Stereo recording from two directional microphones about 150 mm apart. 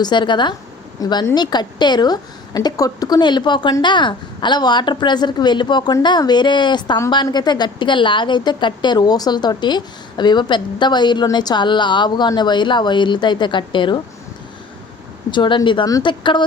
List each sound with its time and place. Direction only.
0.0 s a woman's voice: 30° left (ahead or behind)
15.3 s speech: 30° left (ahead or behind)